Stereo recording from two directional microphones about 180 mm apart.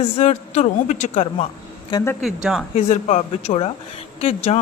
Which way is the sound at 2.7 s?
40° left (ahead or behind).